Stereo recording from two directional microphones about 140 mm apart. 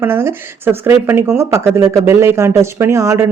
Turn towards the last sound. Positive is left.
turn(degrees=-20)  # may be behind; listen again after turning